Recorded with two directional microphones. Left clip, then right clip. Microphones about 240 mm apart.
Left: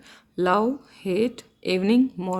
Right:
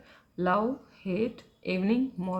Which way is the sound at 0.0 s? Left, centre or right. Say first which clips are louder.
Left 6 dB; left.